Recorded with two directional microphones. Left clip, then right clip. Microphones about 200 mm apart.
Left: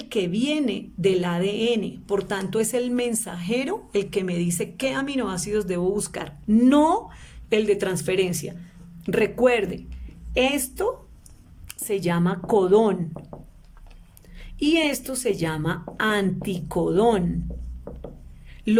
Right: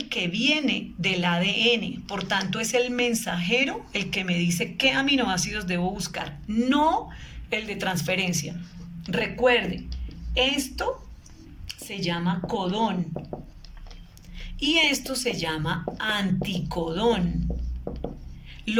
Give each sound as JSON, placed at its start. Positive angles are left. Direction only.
{"t": 0.0, "sound": "a woman's voice", "side_deg": 45}
{"t": 11.9, "sound": "a woman's voice", "side_deg": 65}
{"t": 13.3, "sound": "a sound", "side_deg": 0}
{"t": 14.6, "sound": "a woman's voice", "side_deg": 60}